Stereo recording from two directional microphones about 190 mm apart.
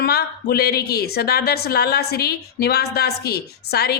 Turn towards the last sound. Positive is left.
turn(degrees=55)  # may be behind; listen again after turning